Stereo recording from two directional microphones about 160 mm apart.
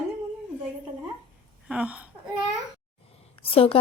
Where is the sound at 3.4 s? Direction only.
35° left (ahead or behind).